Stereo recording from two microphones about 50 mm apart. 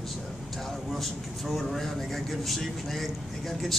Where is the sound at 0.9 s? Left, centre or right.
Centre.